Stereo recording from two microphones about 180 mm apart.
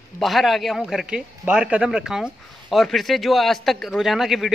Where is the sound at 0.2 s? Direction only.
Centre (ahead or behind).